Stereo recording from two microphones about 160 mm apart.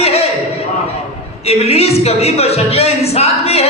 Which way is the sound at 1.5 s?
40° left (ahead or behind).